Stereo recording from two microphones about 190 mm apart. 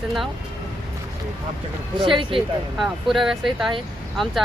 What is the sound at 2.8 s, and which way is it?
Speech, centre (ahead or behind).